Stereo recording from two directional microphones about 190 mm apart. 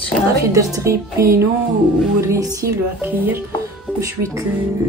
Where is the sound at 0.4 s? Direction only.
15° right (ahead or behind).